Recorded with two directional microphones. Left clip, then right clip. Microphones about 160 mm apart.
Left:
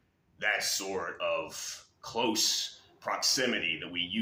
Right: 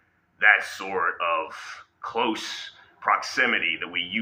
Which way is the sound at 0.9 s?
55° left (ahead or behind).